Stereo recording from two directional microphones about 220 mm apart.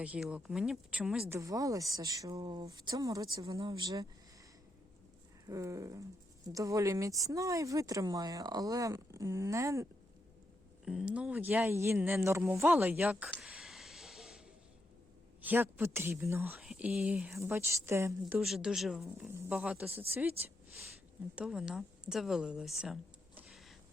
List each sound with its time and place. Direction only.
0.0 s speech: 5° right (ahead or behind)
5.5 s speech: 15° right (ahead or behind)
10.8 s speech: 5° right (ahead or behind)
13.3 s a sound: centre (ahead or behind)
15.4 s speech: 10° right (ahead or behind)
18.3 s speech: centre (ahead or behind)
21.3 s speech: 5° right (ahead or behind)